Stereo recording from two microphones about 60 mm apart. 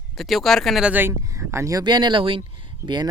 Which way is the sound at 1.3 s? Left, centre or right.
Right.